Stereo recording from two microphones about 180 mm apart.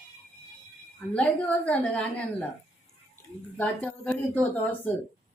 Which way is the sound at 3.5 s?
10° left (ahead or behind).